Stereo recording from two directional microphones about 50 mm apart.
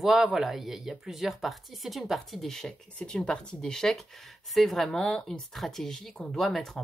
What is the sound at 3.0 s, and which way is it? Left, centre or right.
Speech, centre.